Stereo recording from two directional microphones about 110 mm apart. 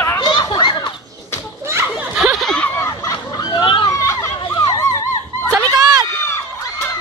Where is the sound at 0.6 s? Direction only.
40° left (ahead or behind).